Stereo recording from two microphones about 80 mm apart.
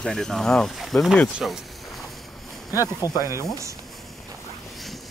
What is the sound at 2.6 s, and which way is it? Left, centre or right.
Speech, left.